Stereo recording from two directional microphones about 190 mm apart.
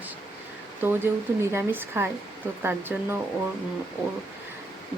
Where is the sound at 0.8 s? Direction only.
10° right (ahead or behind).